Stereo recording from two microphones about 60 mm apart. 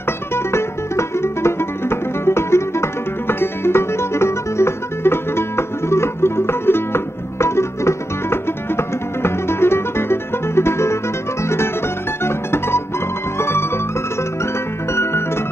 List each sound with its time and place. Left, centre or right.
0.3 s music: left